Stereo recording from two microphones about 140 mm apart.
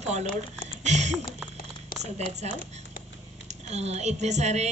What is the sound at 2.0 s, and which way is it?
Speech, 50° right (ahead or behind).